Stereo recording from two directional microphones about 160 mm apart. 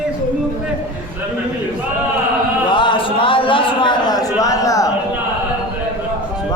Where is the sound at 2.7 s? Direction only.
30° left (ahead or behind).